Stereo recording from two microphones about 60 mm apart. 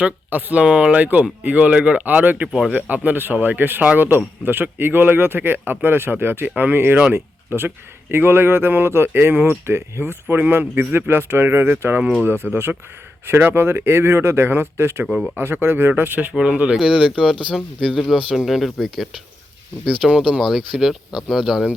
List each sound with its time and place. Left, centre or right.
0.0 s speech: right
0.6 s speech: centre; by 15.0 s right
15.0 s speech: centre
15.4 s speech: right
16.3 s speech: centre
19.8 s speech: centre
20.4 s speech: centre